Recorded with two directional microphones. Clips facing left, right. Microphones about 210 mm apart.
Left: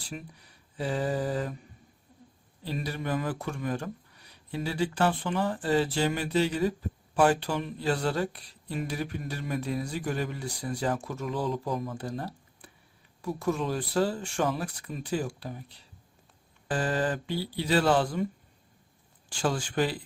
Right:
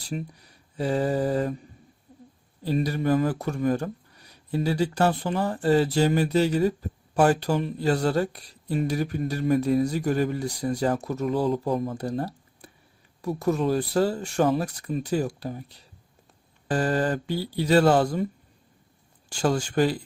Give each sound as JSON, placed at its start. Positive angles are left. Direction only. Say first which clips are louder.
{"t": 0.1, "sound": "speech", "louder": "right 8 dB", "side_deg": -40}
{"t": 2.6, "sound": "speech", "louder": "right 9 dB", "side_deg": -40}
{"t": 11.9, "sound": "a sound", "louder": "right 6 dB", "side_deg": -40}
{"t": 13.2, "sound": "speech", "louder": "right 5 dB", "side_deg": -40}
{"t": 16.6, "sound": "speech", "louder": "right 4 dB", "side_deg": -40}
{"t": 19.3, "sound": "speech", "louder": "right 5 dB", "side_deg": -40}